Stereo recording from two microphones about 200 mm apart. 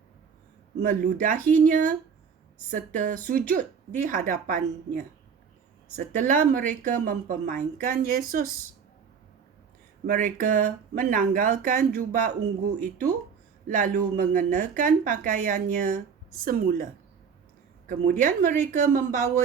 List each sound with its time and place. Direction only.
0.8 s a woman's voice: 40° right (ahead or behind)
6.1 s speech: 40° right (ahead or behind)
10.2 s speech: 40° right (ahead or behind)
13.7 s a woman's voice: 40° right (ahead or behind)